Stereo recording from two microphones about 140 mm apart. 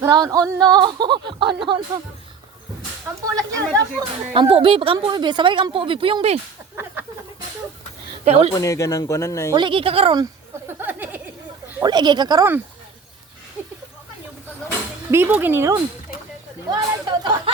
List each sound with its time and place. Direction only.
0.0 s speech: 25° right (ahead or behind)
3.2 s speech: 25° right (ahead or behind)
4.4 s speech: 40° right (ahead or behind)
6.8 s a sound: 15° right (ahead or behind)
8.2 s speech: 45° right (ahead or behind)
8.5 s speech: 20° left (ahead or behind)
9.5 s speech: 35° right (ahead or behind)
10.7 s a sound: 15° right (ahead or behind)
11.8 s speech: 30° right (ahead or behind)
15.1 s speech: 15° right (ahead or behind)
16.6 s speech: 30° right (ahead or behind)